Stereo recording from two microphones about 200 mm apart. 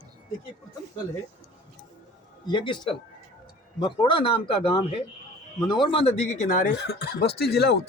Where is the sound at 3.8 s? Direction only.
25° left (ahead or behind).